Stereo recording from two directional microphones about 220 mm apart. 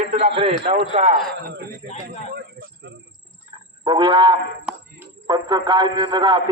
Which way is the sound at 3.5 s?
20° right (ahead or behind).